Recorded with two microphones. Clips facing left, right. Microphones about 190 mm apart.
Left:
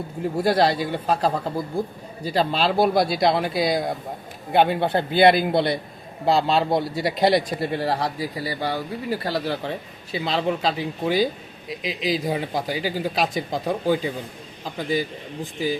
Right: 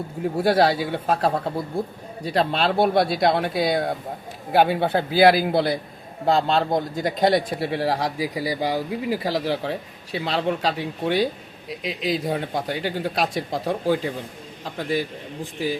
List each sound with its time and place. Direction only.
0.2 s a man's voice: 5° right (ahead or behind)